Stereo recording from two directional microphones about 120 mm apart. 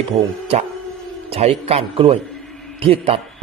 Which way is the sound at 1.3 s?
60° right (ahead or behind).